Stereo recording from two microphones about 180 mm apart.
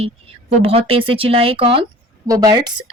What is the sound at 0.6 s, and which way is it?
Speech, 30° right (ahead or behind).